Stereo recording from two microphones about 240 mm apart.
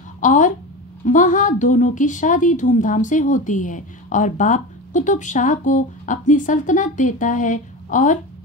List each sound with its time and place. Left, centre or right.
0.2 s a woman's voice: left